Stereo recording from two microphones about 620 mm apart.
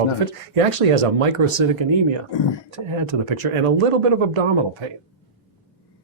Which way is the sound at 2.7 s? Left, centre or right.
Right.